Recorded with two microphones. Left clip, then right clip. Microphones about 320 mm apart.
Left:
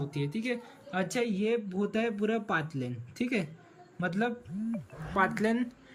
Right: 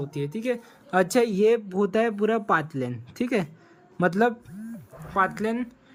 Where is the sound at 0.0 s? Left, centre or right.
Centre.